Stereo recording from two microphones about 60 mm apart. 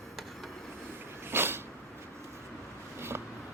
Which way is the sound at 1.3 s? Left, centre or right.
Right.